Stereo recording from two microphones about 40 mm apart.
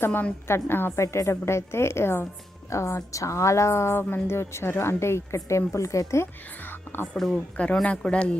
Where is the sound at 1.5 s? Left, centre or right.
Left.